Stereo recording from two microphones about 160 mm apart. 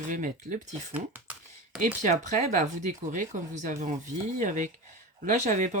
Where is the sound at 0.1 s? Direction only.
55° right (ahead or behind).